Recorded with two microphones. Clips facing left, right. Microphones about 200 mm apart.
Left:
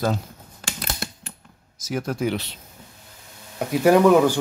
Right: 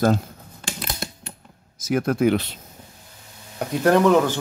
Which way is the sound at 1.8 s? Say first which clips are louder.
Right 6 dB; 60° right (ahead or behind).